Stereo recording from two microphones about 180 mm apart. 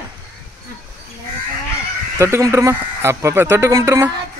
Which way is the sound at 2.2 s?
15° right (ahead or behind).